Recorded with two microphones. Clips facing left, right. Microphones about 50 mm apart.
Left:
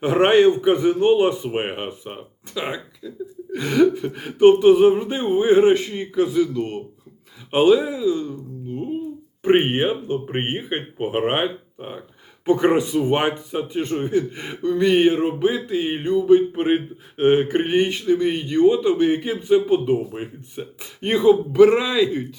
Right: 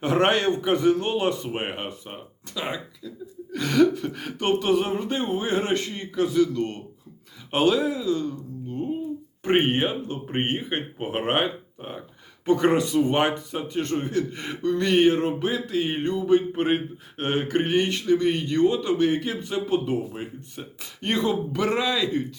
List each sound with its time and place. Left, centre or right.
0.0 s speech: centre